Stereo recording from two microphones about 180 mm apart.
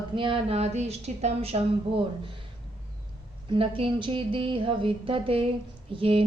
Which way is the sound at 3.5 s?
30° right (ahead or behind).